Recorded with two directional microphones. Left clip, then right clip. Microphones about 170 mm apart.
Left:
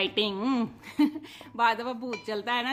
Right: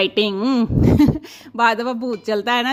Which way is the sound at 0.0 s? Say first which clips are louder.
Right 9 dB; 40° right (ahead or behind).